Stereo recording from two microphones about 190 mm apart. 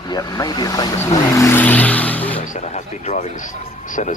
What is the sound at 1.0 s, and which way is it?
Vehicle, 15° left (ahead or behind).